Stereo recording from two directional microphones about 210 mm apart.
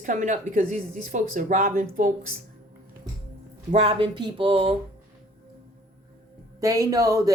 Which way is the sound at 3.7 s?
30° right (ahead or behind).